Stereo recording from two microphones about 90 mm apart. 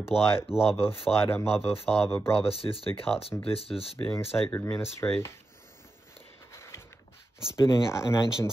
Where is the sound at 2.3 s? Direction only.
90° left.